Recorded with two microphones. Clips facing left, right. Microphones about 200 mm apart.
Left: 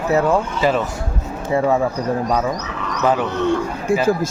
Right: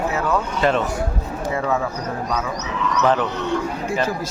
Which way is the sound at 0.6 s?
5° left (ahead or behind).